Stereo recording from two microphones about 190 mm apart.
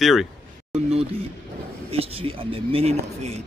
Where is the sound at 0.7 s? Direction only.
35° right (ahead or behind).